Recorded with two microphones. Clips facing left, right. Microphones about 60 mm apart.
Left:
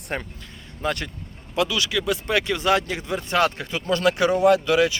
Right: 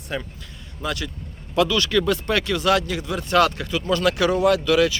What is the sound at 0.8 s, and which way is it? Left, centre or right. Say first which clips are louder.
Speech: left 1 dB; left.